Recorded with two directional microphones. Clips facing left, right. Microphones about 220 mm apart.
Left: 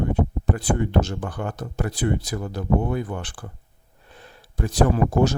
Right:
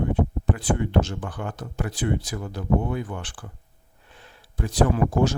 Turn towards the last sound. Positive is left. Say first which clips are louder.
# left 2 dB
turn(degrees=40)  # may be behind; listen again after turning